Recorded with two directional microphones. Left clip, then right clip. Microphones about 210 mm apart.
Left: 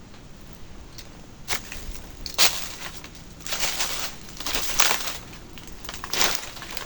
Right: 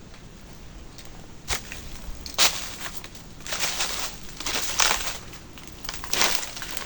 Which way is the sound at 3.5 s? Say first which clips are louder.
Even; centre (ahead or behind).